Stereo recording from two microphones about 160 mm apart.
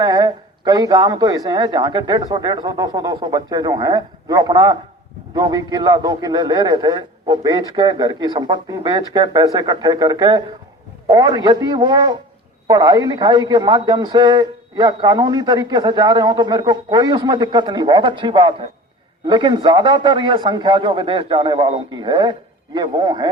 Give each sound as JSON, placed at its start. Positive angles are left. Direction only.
{"t": 0.0, "sound": "a man's voice", "side_deg": -25}